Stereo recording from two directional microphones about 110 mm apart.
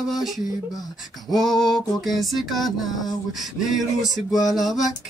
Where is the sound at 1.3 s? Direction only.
Centre (ahead or behind).